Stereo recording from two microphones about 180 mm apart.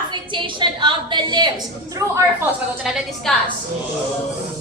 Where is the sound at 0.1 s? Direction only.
25° right (ahead or behind).